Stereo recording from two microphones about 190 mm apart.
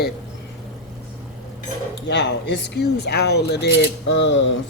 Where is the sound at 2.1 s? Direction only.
70° left (ahead or behind).